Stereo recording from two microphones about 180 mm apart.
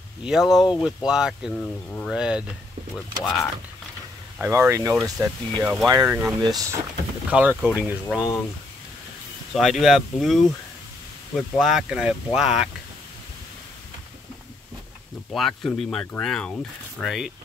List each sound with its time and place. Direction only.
0.2 s speech: centre (ahead or behind)
2.0 s speech: 5° right (ahead or behind)
4.4 s speech: 15° right (ahead or behind)
6.4 s speech: 20° right (ahead or behind)
7.2 s speech: 10° right (ahead or behind)
9.5 s speech: centre (ahead or behind)
15.3 s speech: centre (ahead or behind)